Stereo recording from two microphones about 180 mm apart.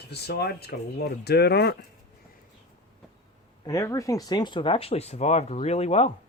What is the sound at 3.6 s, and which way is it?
Speech, 20° left (ahead or behind).